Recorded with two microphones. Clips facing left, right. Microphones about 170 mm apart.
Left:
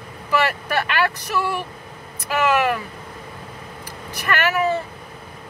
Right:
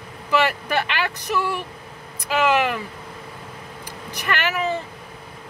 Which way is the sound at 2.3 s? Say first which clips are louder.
Even; 15° right (ahead or behind).